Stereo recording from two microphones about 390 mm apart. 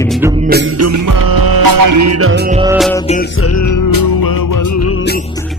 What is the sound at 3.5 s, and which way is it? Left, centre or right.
Music, left.